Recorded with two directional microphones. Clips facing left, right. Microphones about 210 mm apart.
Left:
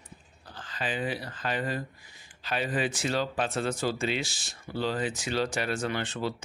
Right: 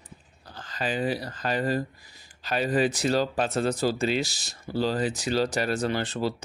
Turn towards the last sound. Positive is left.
turn(degrees=-35)  # may be behind; listen again after turning